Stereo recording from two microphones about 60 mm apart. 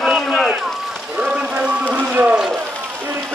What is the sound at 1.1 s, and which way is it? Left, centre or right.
Rain, centre.